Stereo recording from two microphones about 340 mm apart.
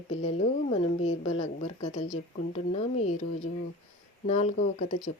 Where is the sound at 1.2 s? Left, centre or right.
Left.